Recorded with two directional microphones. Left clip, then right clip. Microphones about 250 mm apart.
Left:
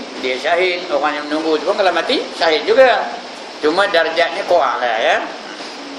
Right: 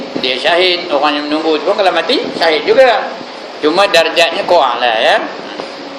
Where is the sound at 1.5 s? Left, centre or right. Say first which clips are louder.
Right 3 dB; centre.